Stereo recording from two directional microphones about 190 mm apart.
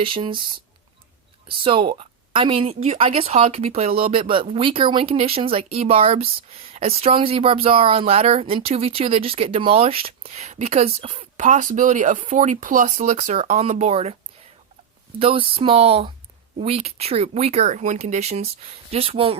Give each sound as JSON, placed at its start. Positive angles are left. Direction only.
{"t": 0.0, "sound": "speech", "side_deg": -25}
{"t": 1.5, "sound": "speech", "side_deg": -25}
{"t": 15.2, "sound": "speech", "side_deg": -30}